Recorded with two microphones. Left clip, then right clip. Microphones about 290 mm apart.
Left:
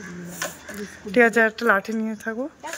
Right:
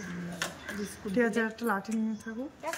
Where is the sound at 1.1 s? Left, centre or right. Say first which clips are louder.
Left 12 dB; centre.